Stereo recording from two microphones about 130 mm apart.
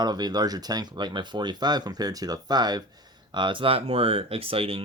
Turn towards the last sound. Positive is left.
turn(degrees=-45)  # may be behind; listen again after turning